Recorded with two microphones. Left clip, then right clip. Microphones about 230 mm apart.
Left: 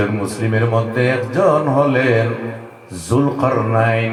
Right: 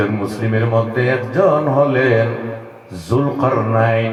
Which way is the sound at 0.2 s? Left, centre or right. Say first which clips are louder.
Left 1 dB; left.